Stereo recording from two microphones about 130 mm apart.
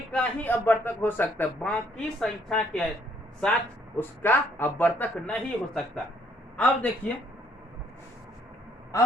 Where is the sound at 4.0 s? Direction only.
15° left (ahead or behind).